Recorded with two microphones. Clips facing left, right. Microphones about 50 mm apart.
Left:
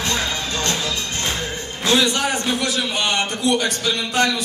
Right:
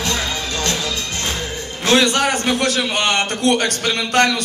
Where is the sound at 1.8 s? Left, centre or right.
Right.